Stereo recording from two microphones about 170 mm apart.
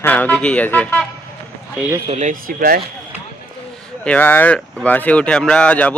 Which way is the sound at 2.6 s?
60° right (ahead or behind).